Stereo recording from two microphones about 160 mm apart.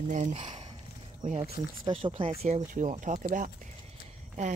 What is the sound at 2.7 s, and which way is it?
Speech, 55° right (ahead or behind).